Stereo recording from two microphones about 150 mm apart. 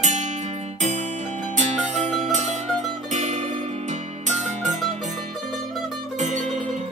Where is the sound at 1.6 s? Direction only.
50° right (ahead or behind).